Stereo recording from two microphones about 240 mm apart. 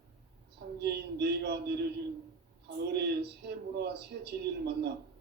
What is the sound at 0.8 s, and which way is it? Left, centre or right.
A man's voice, right.